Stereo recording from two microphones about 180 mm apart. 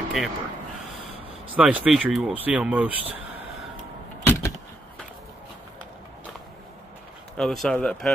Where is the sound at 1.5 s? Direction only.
5° right (ahead or behind).